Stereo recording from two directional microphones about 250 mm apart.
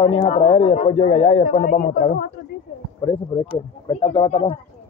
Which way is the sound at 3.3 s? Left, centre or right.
Centre.